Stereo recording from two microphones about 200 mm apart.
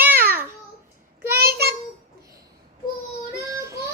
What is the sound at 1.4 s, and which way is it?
Child singing, 55° right (ahead or behind).